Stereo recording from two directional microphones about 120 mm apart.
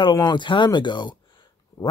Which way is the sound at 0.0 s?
40° left (ahead or behind).